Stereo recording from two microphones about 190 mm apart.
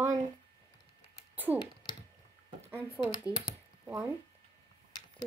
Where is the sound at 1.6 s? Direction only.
25° left (ahead or behind).